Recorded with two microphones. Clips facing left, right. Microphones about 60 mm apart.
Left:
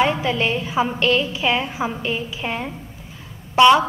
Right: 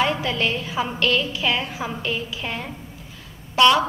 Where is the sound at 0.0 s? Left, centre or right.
Centre.